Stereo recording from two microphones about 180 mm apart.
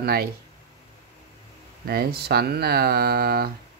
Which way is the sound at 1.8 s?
60° right (ahead or behind).